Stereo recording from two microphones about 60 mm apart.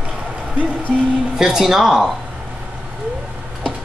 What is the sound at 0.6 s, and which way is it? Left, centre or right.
Music, right.